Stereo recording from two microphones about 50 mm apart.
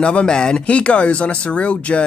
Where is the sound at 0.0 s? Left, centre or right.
Left.